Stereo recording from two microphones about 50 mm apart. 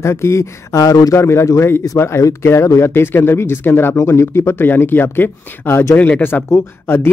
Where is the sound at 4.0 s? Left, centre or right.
Left.